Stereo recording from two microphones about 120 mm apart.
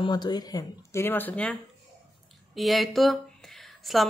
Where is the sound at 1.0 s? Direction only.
15° left (ahead or behind).